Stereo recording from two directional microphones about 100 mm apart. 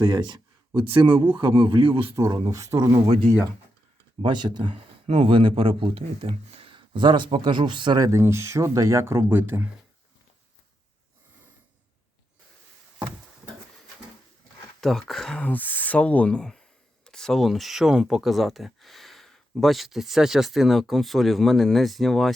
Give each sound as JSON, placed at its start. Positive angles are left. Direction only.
{"t": 0.0, "sound": "speech", "side_deg": -45}
{"t": 2.5, "sound": "speech", "side_deg": -35}
{"t": 4.2, "sound": "speech", "side_deg": -50}
{"t": 8.0, "sound": "speech", "side_deg": -30}
{"t": 14.8, "sound": "speech", "side_deg": 5}